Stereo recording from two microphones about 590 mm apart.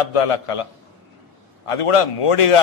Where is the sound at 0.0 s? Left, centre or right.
Left.